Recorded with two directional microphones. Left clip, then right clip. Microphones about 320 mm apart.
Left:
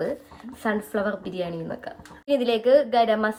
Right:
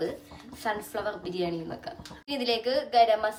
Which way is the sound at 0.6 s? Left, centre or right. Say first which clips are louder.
Left 5 dB; centre.